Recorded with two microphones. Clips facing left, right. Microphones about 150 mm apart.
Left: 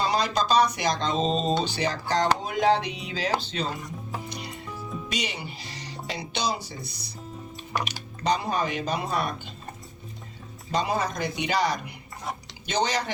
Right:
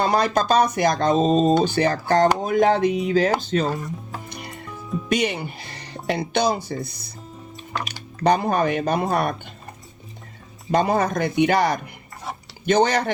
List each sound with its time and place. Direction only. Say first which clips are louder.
0.0 s speech: right 5 dB; 55° right (ahead or behind)
4.3 s music: right 1 dB; 55° right (ahead or behind)
5.0 s speech: right 12 dB; 55° right (ahead or behind)
7.7 s speech: even; 10° left (ahead or behind)
8.2 s speech: right 7 dB; 55° right (ahead or behind)
10.7 s speech: right 7 dB; 55° right (ahead or behind)